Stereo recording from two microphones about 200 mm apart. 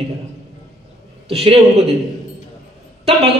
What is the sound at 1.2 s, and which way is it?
Speech, 30° right (ahead or behind).